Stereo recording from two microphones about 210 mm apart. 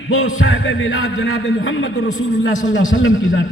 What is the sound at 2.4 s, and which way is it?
Speech, 40° left (ahead or behind).